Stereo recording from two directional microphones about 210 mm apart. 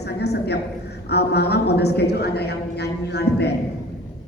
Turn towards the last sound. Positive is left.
turn(degrees=50)  # may be behind; listen again after turning